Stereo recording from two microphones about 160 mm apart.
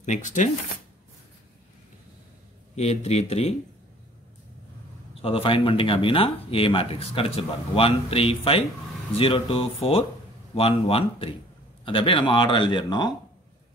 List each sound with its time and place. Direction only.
0.0 s speech: 50° left (ahead or behind)
2.7 s speech: 40° left (ahead or behind)
5.2 s speech: 35° left (ahead or behind)